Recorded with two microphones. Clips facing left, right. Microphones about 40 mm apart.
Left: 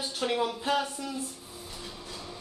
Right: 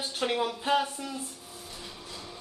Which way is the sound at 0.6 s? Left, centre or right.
Centre.